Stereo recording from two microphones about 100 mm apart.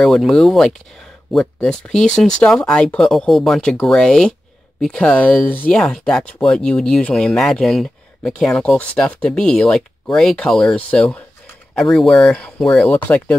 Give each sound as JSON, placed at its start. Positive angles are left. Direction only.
{"t": 0.0, "sound": "speech", "side_deg": 5}
{"t": 13.1, "sound": "speech", "side_deg": 20}